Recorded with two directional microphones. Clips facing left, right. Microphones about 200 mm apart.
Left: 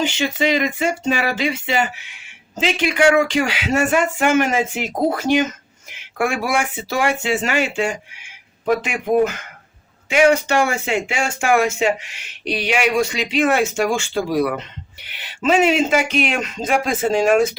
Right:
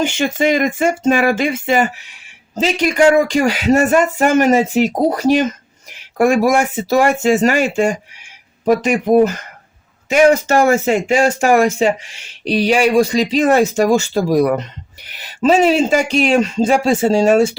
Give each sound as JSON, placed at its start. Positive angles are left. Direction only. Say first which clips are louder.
{"t": 0.0, "sound": "speech", "louder": "right 4 dB", "side_deg": -50}